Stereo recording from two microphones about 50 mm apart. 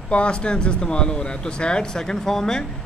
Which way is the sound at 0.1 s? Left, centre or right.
Left.